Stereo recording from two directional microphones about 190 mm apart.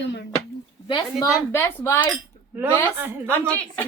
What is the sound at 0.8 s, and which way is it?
A woman's voice, 20° left (ahead or behind).